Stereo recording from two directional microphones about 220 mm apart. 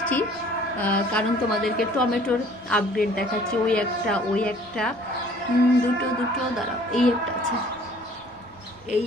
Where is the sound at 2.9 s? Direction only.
40° left (ahead or behind).